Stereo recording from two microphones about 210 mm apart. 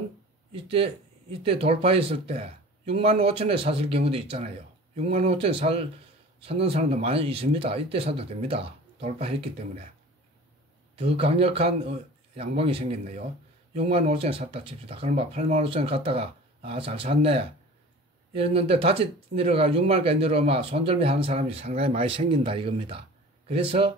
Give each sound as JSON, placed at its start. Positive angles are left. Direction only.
{"t": 0.5, "sound": "speech", "side_deg": -25}
{"t": 11.0, "sound": "speech", "side_deg": -30}